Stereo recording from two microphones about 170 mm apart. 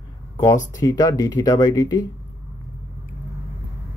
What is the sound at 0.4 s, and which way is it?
Speech, 20° left (ahead or behind).